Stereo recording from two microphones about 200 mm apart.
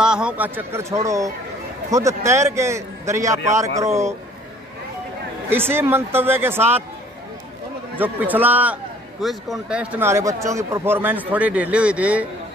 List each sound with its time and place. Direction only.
0.0 s a man's voice: 5° right (ahead or behind)
5.7 s a man's voice: 10° right (ahead or behind)
8.0 s a man's voice: 10° right (ahead or behind)